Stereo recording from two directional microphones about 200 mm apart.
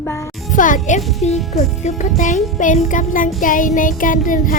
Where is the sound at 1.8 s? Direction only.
35° left (ahead or behind).